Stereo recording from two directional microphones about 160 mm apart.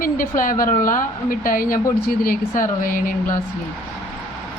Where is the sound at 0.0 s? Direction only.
60° left (ahead or behind).